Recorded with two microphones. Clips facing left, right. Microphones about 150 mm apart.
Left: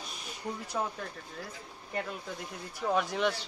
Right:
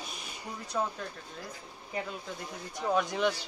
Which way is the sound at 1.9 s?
Centre (ahead or behind).